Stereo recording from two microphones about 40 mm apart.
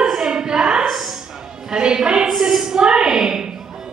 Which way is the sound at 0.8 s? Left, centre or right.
Centre.